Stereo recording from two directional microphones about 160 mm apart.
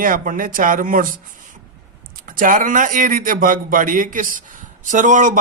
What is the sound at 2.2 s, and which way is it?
Speech, 60° right (ahead or behind).